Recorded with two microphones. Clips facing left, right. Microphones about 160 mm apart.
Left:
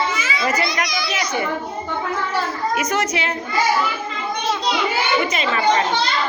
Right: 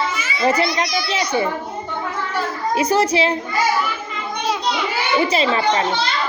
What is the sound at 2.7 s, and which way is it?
Speech, 30° right (ahead or behind).